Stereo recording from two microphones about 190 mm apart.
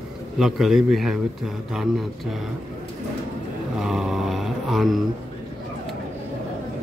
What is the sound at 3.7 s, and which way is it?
Mantra, 5° right (ahead or behind).